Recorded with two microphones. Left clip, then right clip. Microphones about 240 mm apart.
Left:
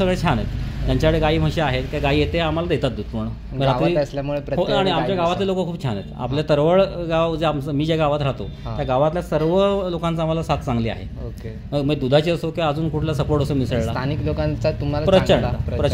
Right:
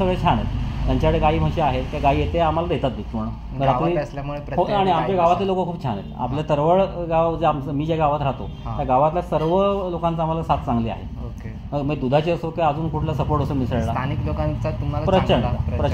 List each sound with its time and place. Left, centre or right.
0.0 s a man's voice: left
3.9 s speech: left
4.7 s a man's voice: left
13.9 s speech: left
15.0 s a man's voice: left